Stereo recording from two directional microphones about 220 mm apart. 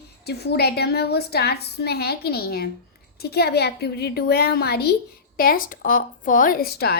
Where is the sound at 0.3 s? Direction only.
45° left (ahead or behind).